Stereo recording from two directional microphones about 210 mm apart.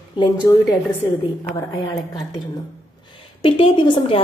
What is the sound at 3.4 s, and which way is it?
Speech, 25° left (ahead or behind).